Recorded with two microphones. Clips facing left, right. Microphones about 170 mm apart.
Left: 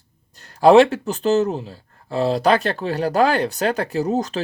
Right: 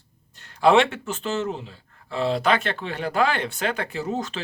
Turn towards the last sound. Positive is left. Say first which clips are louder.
# left 7 dB
turn(degrees=40)  # may be behind; listen again after turning